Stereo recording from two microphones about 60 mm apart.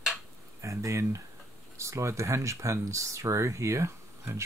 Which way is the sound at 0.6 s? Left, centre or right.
Right.